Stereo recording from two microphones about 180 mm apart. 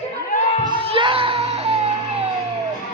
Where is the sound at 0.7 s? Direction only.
30° right (ahead or behind).